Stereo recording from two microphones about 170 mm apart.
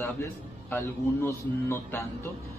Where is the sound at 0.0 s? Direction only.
15° left (ahead or behind).